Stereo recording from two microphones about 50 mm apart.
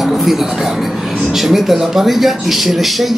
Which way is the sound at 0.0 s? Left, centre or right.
Centre.